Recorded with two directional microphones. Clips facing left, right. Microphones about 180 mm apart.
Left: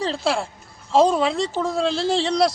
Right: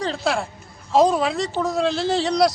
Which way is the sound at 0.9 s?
Centre (ahead or behind).